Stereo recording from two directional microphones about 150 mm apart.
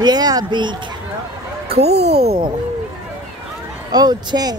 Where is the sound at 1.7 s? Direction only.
45° right (ahead or behind).